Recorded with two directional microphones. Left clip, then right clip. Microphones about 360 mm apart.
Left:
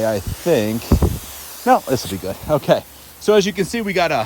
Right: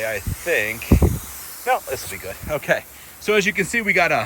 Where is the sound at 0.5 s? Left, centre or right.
Left.